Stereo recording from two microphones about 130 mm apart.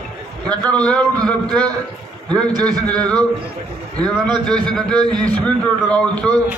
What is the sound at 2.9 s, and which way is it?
Speech, 10° left (ahead or behind).